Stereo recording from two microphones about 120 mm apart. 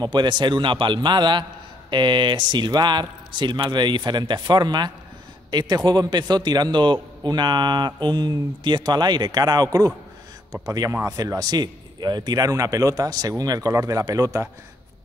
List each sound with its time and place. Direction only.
0.0 s a man's voice: 40° right (ahead or behind)